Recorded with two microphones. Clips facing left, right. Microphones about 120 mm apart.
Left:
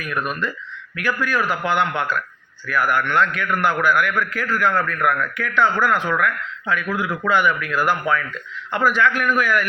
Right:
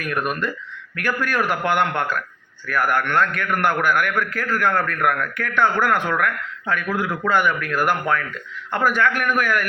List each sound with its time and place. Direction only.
0.0 s a man's voice: 55° right (ahead or behind)